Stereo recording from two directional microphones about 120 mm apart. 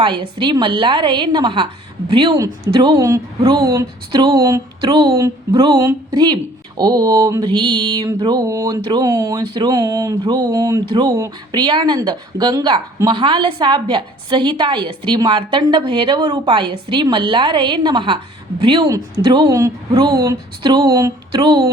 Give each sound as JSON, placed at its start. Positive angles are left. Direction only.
{"t": 0.0, "sound": "a woman's voice", "side_deg": -45}
{"t": 4.8, "sound": "a woman's voice", "side_deg": -40}
{"t": 5.1, "sound": "a woman's voice", "side_deg": -25}